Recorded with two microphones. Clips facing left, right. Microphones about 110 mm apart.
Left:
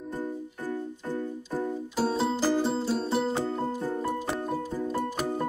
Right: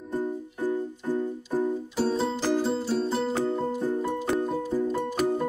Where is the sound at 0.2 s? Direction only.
20° right (ahead or behind).